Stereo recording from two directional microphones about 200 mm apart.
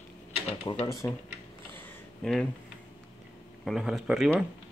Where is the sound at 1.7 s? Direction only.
5° left (ahead or behind).